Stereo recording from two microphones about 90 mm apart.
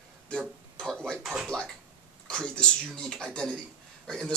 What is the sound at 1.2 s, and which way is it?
Speech, 5° right (ahead or behind).